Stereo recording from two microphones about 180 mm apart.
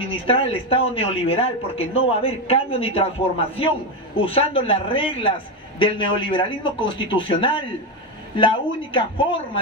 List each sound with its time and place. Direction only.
0.1 s a man's voice: 30° left (ahead or behind)